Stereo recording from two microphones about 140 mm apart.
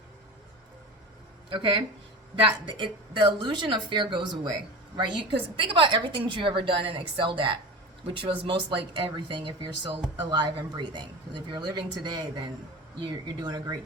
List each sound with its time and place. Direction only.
1.5 s a woman's voice: 35° right (ahead or behind)